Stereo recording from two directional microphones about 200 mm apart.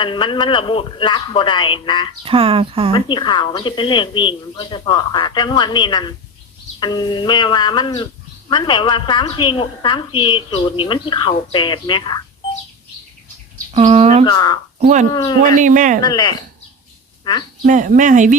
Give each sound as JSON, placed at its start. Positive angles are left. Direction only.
{"t": 0.0, "sound": "a woman's voice", "side_deg": 25}
{"t": 2.2, "sound": "speech", "side_deg": -30}
{"t": 2.9, "sound": "a woman's voice", "side_deg": 20}
{"t": 13.7, "sound": "speech", "side_deg": -30}
{"t": 14.3, "sound": "a woman's voice", "side_deg": 20}
{"t": 14.8, "sound": "speech", "side_deg": -35}
{"t": 16.0, "sound": "a woman's voice", "side_deg": 20}
{"t": 17.6, "sound": "speech", "side_deg": -40}